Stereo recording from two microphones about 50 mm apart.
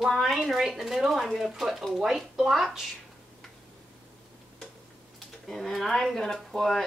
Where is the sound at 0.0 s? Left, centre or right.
Centre.